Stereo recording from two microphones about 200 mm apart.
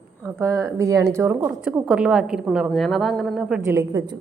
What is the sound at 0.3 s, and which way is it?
Speech, 15° right (ahead or behind).